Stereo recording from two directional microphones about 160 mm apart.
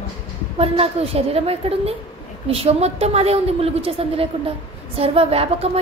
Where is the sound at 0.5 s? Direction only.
35° right (ahead or behind).